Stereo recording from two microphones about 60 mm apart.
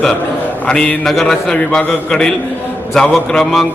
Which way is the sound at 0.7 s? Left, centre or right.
Centre.